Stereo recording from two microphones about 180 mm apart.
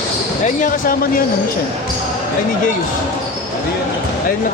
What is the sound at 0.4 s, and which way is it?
Speech, 50° left (ahead or behind).